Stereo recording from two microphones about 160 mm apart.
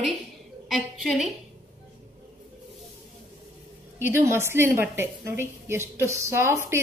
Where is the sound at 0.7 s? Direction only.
Centre (ahead or behind).